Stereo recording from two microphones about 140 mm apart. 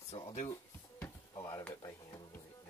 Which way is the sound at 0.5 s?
15° left (ahead or behind).